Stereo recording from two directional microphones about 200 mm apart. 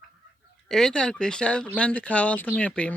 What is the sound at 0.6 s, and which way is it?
Speech, centre (ahead or behind).